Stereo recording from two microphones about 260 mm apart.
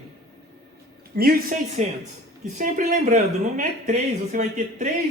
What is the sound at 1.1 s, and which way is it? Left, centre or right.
A man's voice, right.